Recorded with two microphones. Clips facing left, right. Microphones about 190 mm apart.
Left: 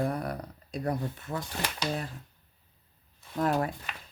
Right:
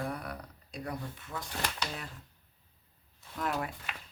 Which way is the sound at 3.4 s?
40° left (ahead or behind).